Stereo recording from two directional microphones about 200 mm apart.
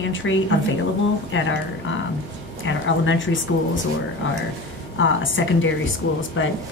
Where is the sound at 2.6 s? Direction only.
70° left (ahead or behind).